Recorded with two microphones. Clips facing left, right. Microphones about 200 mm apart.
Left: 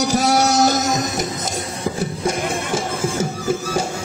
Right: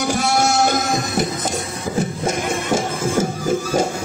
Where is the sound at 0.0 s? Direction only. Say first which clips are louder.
Left 2 dB; 40° left (ahead or behind).